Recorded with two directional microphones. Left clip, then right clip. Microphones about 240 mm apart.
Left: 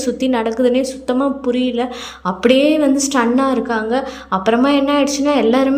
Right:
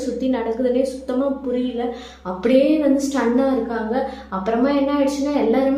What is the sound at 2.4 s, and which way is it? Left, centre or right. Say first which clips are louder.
A woman's voice: left 3 dB; left.